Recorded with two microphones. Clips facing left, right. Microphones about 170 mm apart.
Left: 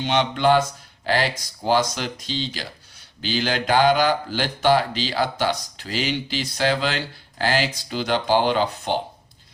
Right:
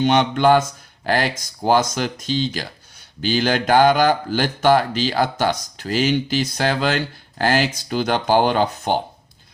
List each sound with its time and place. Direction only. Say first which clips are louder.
0.0 s speech: right 4 dB; 50° right (ahead or behind)